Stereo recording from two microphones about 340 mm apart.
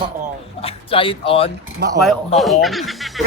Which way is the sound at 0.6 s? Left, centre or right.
Centre.